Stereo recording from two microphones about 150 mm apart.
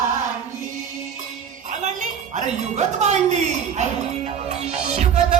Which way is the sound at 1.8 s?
50° right (ahead or behind).